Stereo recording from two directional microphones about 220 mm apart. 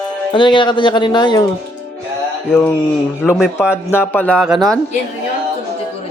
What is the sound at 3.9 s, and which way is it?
Speech, 10° left (ahead or behind).